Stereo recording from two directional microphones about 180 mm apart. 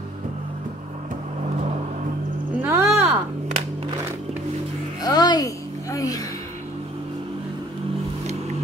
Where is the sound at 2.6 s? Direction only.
10° right (ahead or behind).